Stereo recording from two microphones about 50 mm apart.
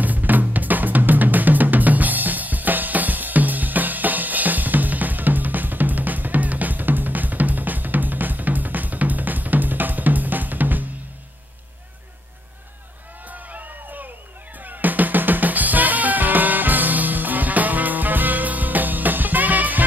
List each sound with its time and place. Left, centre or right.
0.0 s drum: right
13.3 s a sound: right
14.6 s drum kit: right